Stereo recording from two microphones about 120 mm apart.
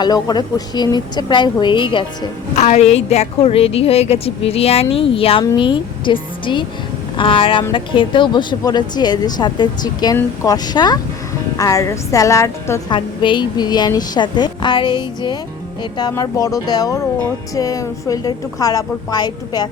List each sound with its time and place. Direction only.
0.0 s speech: 35° left (ahead or behind)
2.6 s a woman's voice: 65° left (ahead or behind); by 12.8 s 25° left (ahead or behind)
12.9 s a woman's voice: 40° left (ahead or behind)